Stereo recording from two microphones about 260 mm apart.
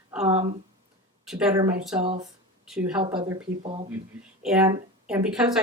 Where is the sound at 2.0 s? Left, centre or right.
Right.